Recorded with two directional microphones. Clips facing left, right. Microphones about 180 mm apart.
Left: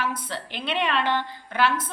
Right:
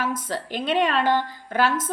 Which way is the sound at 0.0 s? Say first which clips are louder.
Right 3 dB; 45° right (ahead or behind).